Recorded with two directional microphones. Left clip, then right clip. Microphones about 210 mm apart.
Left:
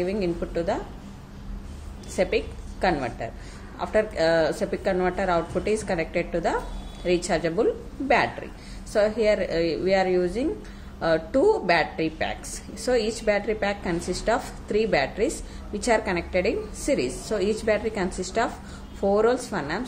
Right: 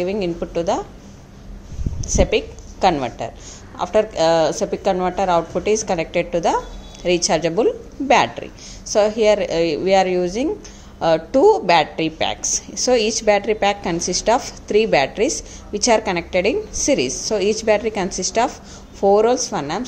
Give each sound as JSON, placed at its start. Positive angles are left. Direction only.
{"t": 0.0, "sound": "speech", "side_deg": -25}
{"t": 2.1, "sound": "a woman's voice", "side_deg": -25}
{"t": 12.4, "sound": "a woman's voice", "side_deg": 5}
{"t": 12.8, "sound": "speech", "side_deg": -25}